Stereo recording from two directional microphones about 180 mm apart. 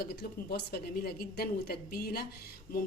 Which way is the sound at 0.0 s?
60° left (ahead or behind).